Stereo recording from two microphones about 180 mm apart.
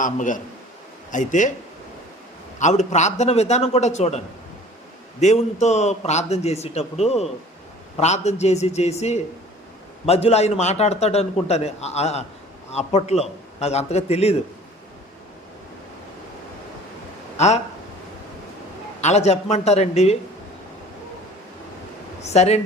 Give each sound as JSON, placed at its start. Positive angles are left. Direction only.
{"t": 0.0, "sound": "speech", "side_deg": 45}
{"t": 2.6, "sound": "a man's voice", "side_deg": 40}
{"t": 5.2, "sound": "a man's voice", "side_deg": 40}
{"t": 17.3, "sound": "speech", "side_deg": 40}
{"t": 19.0, "sound": "a man's voice", "side_deg": 35}
{"t": 22.2, "sound": "a man's voice", "side_deg": 35}